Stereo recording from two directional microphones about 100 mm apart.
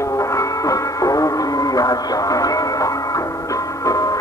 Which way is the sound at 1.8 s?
40° left (ahead or behind).